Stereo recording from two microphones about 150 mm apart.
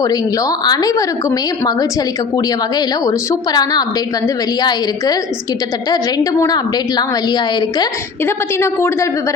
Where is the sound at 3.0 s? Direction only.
25° left (ahead or behind).